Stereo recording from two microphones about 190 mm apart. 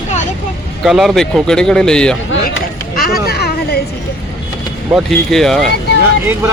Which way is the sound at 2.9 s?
50° left (ahead or behind).